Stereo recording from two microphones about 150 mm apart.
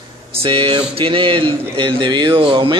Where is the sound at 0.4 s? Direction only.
35° right (ahead or behind).